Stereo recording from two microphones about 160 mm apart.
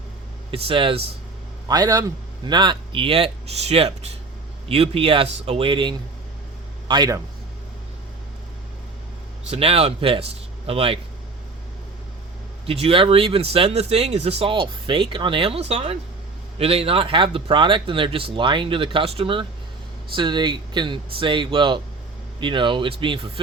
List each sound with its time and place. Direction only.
0.5 s a man's voice: 35° right (ahead or behind)
9.5 s speech: 40° right (ahead or behind)
12.6 s speech: 35° right (ahead or behind)